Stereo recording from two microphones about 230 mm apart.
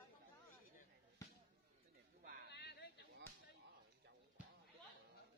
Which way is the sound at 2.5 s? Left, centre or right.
Left.